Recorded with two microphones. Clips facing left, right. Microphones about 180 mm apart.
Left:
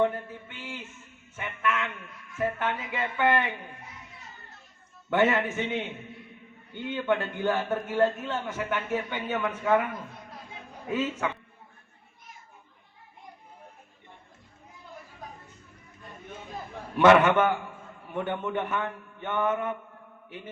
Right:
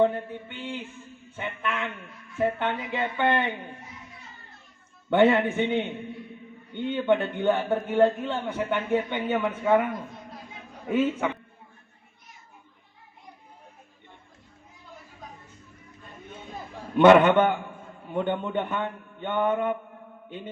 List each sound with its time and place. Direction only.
0.0 s a sound: 20° right (ahead or behind)
1.4 s a man's voice: 25° right (ahead or behind)
5.2 s a man's voice: 20° right (ahead or behind)
17.2 s a man's voice: 30° right (ahead or behind)
18.1 s a man's voice: 20° right (ahead or behind)